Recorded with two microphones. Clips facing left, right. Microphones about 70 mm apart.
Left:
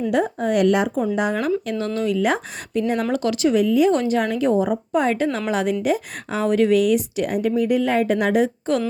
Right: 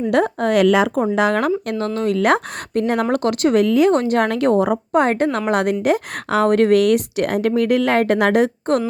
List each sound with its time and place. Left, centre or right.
0.1 s speech: right
2.0 s a woman's voice: right